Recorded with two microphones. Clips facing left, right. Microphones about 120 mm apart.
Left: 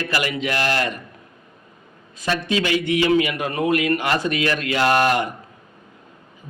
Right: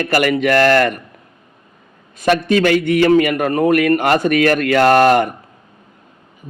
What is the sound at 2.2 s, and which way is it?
A man's voice, 60° right (ahead or behind).